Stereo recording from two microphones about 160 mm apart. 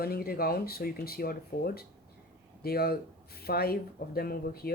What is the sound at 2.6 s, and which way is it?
Speech, 75° left (ahead or behind).